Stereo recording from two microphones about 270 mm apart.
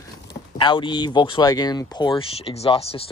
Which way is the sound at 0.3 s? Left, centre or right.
Centre.